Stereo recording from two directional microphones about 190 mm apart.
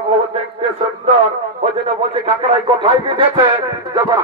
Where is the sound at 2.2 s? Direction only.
30° right (ahead or behind).